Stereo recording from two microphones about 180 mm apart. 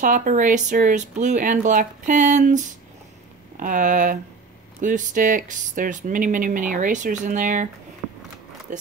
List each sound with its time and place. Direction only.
0.0 s speech: 45° right (ahead or behind)